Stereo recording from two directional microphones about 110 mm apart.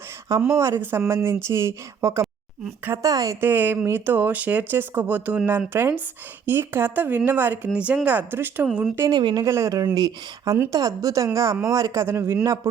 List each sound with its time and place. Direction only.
0.5 s a woman's voice: 25° right (ahead or behind)
3.4 s speech: 15° right (ahead or behind)
9.0 s a woman's voice: 40° right (ahead or behind)
9.5 s a woman's voice: 25° right (ahead or behind)